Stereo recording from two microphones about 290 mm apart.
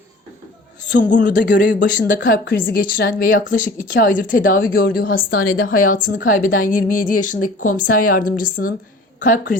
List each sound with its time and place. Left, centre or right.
0.9 s speech: left